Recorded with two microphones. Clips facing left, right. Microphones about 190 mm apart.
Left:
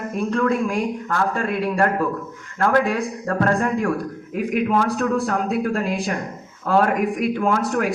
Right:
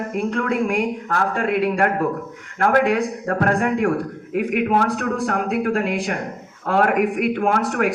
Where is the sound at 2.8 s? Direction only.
70° right (ahead or behind).